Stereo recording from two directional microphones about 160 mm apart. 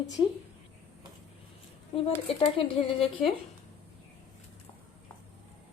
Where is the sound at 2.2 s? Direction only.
35° left (ahead or behind).